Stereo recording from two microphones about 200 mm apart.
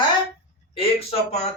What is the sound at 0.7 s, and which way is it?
Speech, 30° left (ahead or behind).